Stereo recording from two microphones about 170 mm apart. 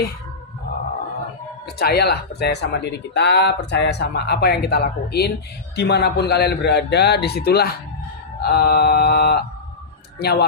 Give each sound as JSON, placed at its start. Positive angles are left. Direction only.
{"t": 1.6, "sound": "speech", "side_deg": 70}